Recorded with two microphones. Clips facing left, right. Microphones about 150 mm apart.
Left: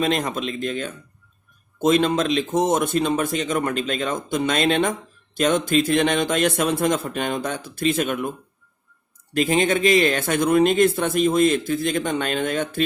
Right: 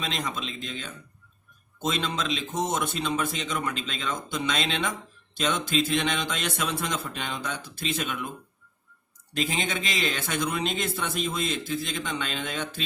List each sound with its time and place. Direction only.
0.0 s speech: 50° left (ahead or behind)
9.3 s speech: 50° left (ahead or behind)